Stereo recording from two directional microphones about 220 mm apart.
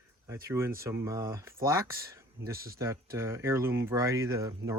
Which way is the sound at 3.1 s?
10° right (ahead or behind).